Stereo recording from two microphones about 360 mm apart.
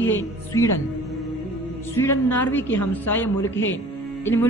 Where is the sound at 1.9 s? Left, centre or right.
Centre.